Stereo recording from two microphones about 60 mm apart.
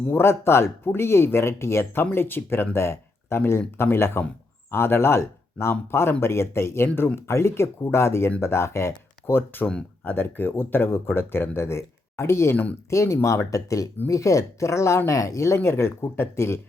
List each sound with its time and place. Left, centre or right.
0.1 s speech: left
10.0 s speech: left